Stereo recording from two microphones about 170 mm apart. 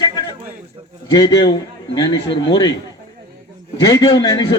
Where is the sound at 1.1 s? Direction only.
20° left (ahead or behind).